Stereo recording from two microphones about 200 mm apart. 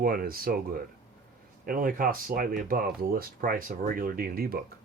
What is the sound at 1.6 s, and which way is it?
Speech, 45° right (ahead or behind).